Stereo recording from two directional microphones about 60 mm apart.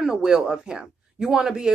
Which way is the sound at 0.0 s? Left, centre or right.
Centre.